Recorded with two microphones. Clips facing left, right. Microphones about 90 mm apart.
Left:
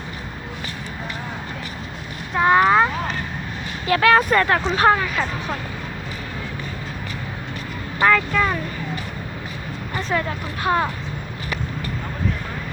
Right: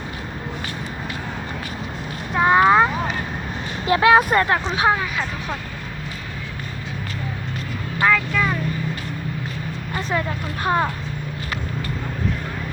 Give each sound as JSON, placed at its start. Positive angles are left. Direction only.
{"t": 2.4, "sound": "a sound", "side_deg": -10}
{"t": 3.8, "sound": "speech", "side_deg": -25}
{"t": 4.7, "sound": "speech", "side_deg": -10}
{"t": 8.0, "sound": "speech", "side_deg": 5}
{"t": 10.6, "sound": "speech", "side_deg": -20}